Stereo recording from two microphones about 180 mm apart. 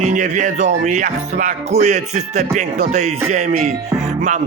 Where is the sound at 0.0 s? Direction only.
45° right (ahead or behind).